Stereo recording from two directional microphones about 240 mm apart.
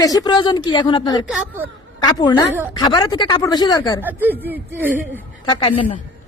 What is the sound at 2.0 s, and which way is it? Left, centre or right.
Speech, centre.